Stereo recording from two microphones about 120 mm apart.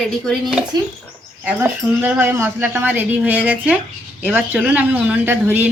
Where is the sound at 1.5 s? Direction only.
15° right (ahead or behind).